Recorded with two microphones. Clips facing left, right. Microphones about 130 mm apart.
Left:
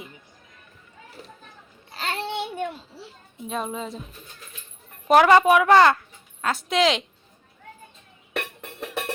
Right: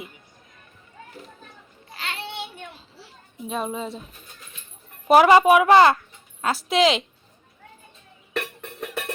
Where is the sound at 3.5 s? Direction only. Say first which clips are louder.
Right 1 dB; 5° right (ahead or behind).